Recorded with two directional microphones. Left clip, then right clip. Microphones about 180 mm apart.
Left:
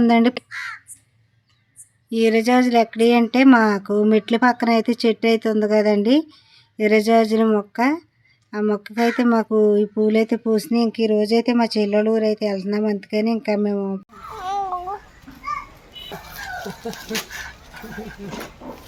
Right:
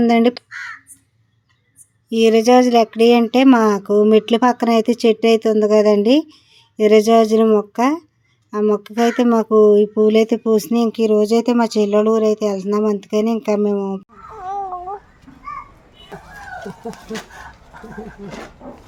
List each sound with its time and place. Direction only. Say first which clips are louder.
0.0 s speech: right 2 dB; 5° right (ahead or behind)
2.0 s speech: right 5 dB; 10° right (ahead or behind)
14.4 s babbling: even; 10° right (ahead or behind)
16.8 s speech: left 2 dB; 30° right (ahead or behind)
18.6 s a sound: even; 10° right (ahead or behind)